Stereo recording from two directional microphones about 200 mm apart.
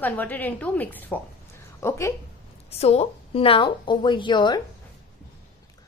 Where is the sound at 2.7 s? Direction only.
30° left (ahead or behind).